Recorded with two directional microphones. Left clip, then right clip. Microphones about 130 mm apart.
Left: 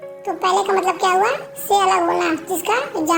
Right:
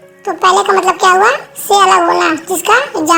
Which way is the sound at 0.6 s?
10° right (ahead or behind).